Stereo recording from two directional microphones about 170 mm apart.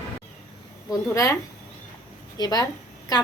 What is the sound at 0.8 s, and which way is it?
Speech, 15° left (ahead or behind).